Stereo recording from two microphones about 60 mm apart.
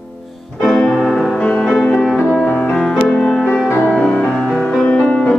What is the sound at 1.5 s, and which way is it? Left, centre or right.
Music, centre.